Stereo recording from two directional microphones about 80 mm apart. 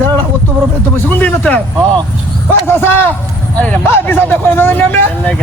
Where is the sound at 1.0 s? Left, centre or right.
Left.